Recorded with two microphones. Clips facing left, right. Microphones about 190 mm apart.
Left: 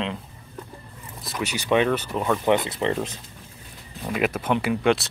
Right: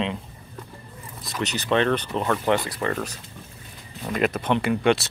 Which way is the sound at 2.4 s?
20° left (ahead or behind).